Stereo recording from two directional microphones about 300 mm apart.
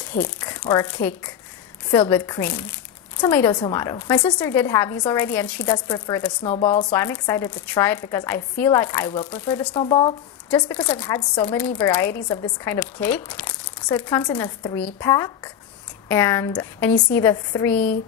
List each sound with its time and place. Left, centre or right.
0.4 s a woman's voice: centre
9.8 s a woman's voice: centre